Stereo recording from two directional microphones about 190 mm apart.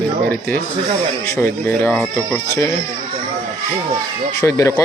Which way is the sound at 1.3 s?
10° left (ahead or behind).